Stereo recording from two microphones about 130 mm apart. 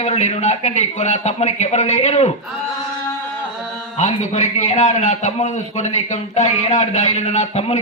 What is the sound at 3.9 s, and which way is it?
A man's voice, 60° left (ahead or behind).